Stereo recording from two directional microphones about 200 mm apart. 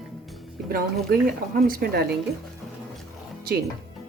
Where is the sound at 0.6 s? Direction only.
45° right (ahead or behind).